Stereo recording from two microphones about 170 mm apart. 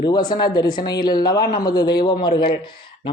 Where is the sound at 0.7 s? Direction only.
60° left (ahead or behind).